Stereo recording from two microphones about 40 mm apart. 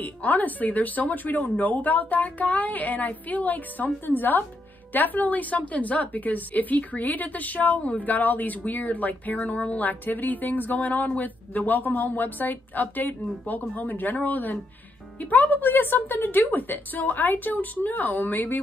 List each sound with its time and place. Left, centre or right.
0.0 s speech: left